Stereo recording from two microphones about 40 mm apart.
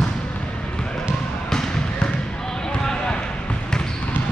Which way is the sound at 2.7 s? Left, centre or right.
Left.